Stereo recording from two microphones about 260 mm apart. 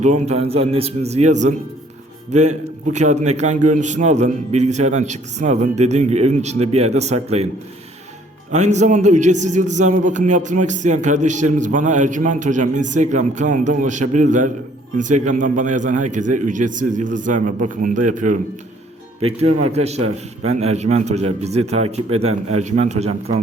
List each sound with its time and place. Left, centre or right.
0.0 s a man's voice: right
8.5 s a man's voice: right